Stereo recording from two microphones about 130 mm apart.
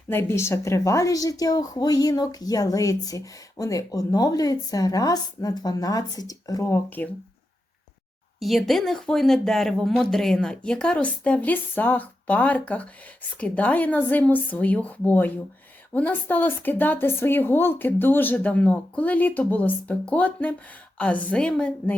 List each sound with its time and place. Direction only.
0.1 s a woman's voice: 20° left (ahead or behind)
8.4 s a woman's voice: centre (ahead or behind)